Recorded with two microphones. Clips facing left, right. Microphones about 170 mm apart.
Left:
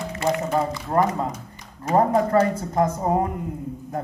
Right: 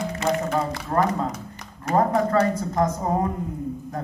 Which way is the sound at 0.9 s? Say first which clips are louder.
Left 1 dB; 25° left (ahead or behind).